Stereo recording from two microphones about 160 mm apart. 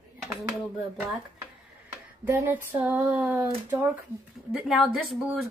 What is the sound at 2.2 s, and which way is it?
Speech, 15° right (ahead or behind).